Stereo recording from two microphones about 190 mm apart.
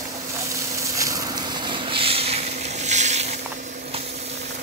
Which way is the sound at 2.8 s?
35° right (ahead or behind).